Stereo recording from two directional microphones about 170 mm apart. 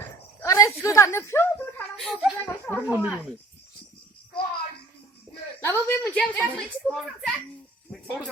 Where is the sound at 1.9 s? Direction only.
Centre (ahead or behind).